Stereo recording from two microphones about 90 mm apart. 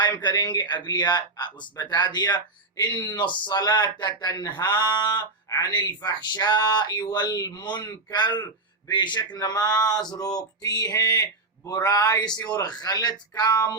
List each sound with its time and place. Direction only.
0.0 s speech: 55° left (ahead or behind)